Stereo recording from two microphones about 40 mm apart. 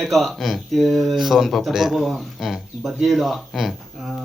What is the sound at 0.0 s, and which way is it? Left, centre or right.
Speech, centre.